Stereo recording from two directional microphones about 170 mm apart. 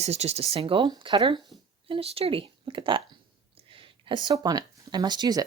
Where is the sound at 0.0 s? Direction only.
40° right (ahead or behind).